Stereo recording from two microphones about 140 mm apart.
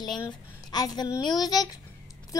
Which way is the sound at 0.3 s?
30° left (ahead or behind).